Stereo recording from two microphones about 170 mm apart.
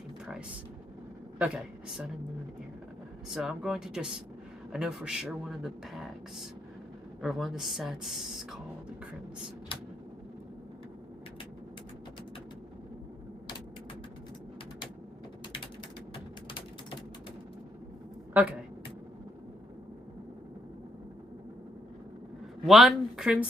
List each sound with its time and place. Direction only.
1.4 s speech: 5° right (ahead or behind)
3.3 s speech: centre (ahead or behind)
18.3 s speech: 10° right (ahead or behind)
22.6 s speech: centre (ahead or behind)